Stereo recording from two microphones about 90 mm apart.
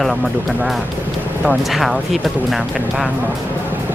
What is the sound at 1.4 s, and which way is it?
Speech, centre (ahead or behind).